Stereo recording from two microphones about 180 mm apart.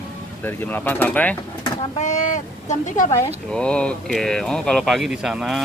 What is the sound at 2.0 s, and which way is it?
Speech, 45° left (ahead or behind).